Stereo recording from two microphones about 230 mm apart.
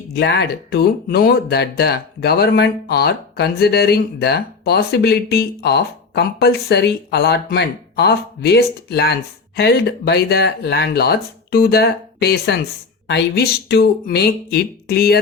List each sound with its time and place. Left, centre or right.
0.1 s speech: left